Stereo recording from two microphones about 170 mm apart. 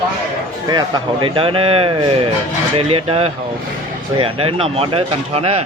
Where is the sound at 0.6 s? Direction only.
25° right (ahead or behind).